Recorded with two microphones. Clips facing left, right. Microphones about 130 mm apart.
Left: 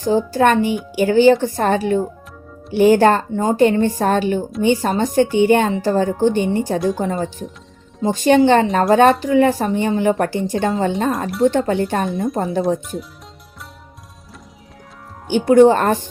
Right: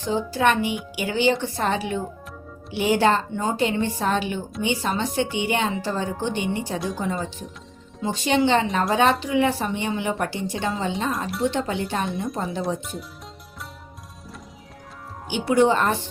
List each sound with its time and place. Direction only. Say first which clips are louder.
0.0 s a woman's voice: left 6 dB; 45° left (ahead or behind)
15.3 s a woman's voice: left 8 dB; 45° left (ahead or behind)